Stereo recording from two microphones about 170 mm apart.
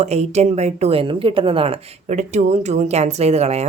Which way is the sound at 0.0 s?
40° right (ahead or behind).